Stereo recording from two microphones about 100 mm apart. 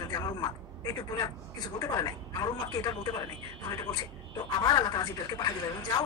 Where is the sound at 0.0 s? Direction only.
40° left (ahead or behind).